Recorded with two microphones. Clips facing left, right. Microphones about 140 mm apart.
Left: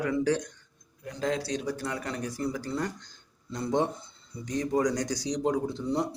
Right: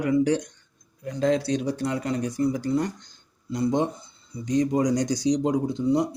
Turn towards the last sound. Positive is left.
turn(degrees=-15)  # may be behind; listen again after turning